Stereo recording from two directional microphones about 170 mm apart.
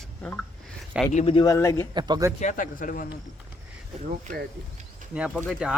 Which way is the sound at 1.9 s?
25° right (ahead or behind).